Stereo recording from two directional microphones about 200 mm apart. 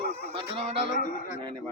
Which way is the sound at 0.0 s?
50° left (ahead or behind).